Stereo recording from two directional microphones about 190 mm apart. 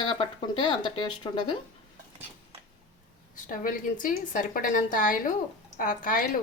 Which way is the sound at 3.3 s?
45° left (ahead or behind).